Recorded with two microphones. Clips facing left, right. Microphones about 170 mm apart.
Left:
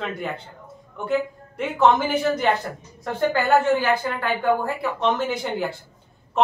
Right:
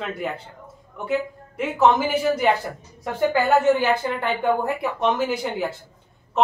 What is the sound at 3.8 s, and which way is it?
Speech, 20° right (ahead or behind).